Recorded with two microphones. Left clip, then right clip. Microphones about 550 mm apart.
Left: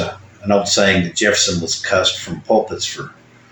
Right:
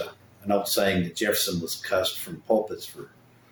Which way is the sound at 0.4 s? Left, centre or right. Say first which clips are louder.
Left 10 dB; right.